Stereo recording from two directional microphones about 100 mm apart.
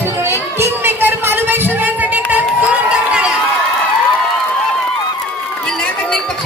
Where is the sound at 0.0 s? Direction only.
25° right (ahead or behind); by 3.3 s 10° right (ahead or behind).